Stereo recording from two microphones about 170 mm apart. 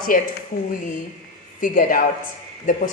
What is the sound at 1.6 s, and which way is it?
Speech, 55° left (ahead or behind).